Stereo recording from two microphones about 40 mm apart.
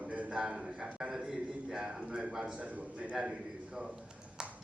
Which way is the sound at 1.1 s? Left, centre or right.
Centre.